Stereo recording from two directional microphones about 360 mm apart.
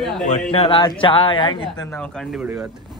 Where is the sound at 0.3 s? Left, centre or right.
Centre.